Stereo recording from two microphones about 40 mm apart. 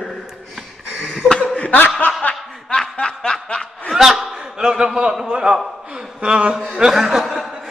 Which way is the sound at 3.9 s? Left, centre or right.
Centre.